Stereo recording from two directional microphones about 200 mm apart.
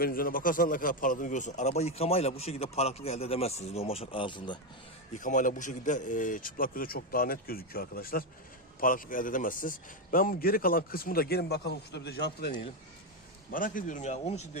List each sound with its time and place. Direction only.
0.0 s a man's voice: 45° left (ahead or behind); by 4.6 s 25° left (ahead or behind)
5.1 s speech: 40° left (ahead or behind); by 12.5 s 55° left (ahead or behind)
13.5 s a man's voice: 45° left (ahead or behind)